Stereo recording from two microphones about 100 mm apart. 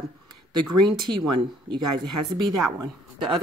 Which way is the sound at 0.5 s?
45° right (ahead or behind).